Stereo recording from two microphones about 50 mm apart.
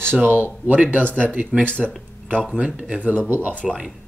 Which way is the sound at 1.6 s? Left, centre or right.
Left.